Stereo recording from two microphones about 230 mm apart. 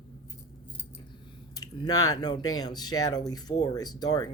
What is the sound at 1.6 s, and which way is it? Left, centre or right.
Speech, centre.